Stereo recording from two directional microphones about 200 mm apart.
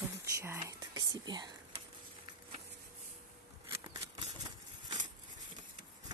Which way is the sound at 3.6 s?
25° right (ahead or behind).